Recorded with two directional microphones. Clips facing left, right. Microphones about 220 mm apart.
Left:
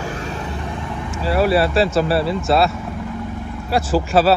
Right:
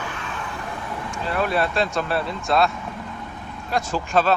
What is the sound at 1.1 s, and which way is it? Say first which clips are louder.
Vehicle: left 7 dB; 5° left (ahead or behind).